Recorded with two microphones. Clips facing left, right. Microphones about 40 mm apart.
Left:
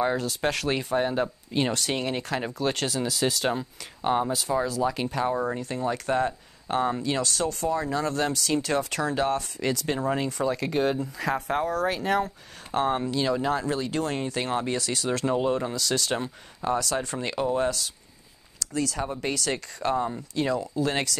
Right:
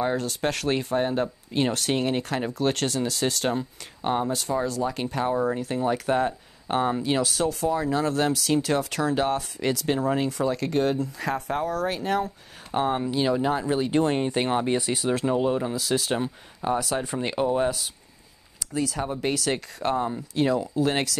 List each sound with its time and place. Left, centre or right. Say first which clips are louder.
0.0 s speech: even; centre
13.1 s speech: right 2 dB; centre